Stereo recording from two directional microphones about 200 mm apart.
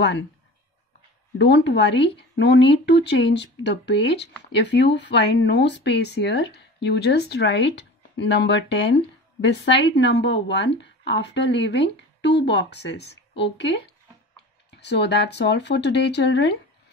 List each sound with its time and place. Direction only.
1.4 s speech: 60° left (ahead or behind)